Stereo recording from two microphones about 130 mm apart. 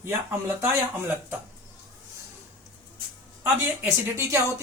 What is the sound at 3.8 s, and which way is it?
Speech, 20° right (ahead or behind).